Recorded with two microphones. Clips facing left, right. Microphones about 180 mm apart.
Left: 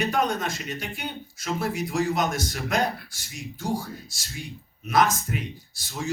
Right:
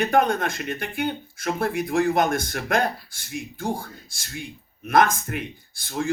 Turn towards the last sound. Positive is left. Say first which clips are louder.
# right 5 dB
turn(degrees=-55)  # may be behind; listen again after turning